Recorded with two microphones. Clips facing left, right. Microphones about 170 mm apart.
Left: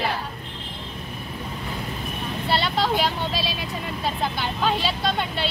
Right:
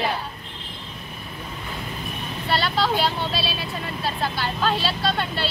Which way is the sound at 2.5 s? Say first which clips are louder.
Even; 20° left (ahead or behind).